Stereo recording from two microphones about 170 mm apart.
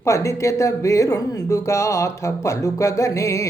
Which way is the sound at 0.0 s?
20° left (ahead or behind).